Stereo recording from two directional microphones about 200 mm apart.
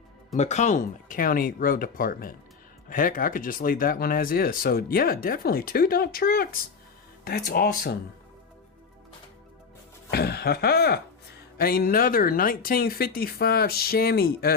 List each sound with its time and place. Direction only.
0.3 s speech: 35° left (ahead or behind); by 7.9 s 50° left (ahead or behind)
10.1 s speech: 50° left (ahead or behind)